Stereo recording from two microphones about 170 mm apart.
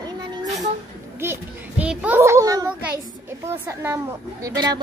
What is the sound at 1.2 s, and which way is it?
A child's voice, 10° right (ahead or behind).